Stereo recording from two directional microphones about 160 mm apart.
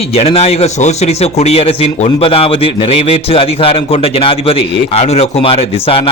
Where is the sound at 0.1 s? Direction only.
40° left (ahead or behind).